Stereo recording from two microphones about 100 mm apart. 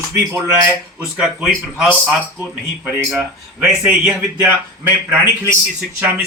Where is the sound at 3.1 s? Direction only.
10° right (ahead or behind).